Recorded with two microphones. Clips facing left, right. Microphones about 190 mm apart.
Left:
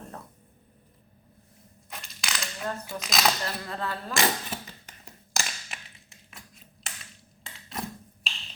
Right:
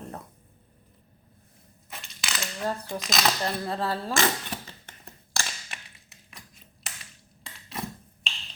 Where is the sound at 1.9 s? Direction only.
Centre (ahead or behind).